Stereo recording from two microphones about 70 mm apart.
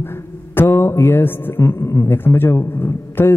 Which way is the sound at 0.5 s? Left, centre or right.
Left.